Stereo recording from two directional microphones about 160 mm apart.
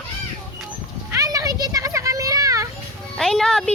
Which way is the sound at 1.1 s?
20° right (ahead or behind).